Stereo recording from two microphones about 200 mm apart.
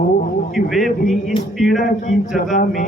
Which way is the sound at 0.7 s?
Centre (ahead or behind).